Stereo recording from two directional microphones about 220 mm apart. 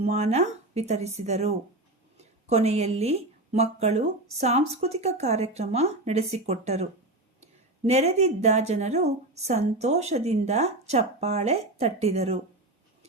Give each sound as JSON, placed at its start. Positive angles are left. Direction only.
{"t": 0.0, "sound": "speech", "side_deg": -30}
{"t": 7.9, "sound": "speech", "side_deg": -30}